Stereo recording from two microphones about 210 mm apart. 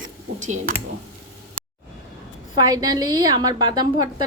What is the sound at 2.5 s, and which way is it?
A woman's voice, 20° right (ahead or behind).